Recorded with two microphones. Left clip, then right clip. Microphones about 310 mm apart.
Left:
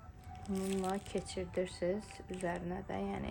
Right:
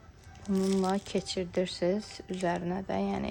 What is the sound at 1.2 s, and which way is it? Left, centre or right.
Speech, right.